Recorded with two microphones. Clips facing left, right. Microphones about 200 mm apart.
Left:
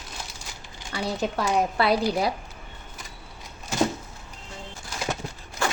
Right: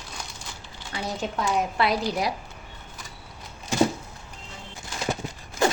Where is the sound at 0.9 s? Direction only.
40° left (ahead or behind).